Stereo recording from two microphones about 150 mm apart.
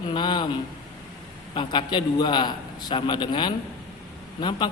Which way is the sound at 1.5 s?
30° left (ahead or behind).